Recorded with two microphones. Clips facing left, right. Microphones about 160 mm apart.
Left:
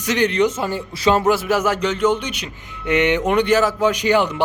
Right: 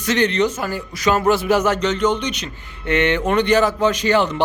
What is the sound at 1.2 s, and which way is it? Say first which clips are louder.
Speech: right 1 dB; 5° left (ahead or behind).